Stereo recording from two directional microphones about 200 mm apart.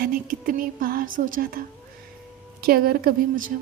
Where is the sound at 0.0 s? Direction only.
45° right (ahead or behind).